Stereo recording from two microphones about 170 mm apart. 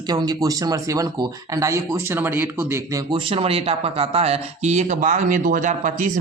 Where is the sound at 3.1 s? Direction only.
30° right (ahead or behind).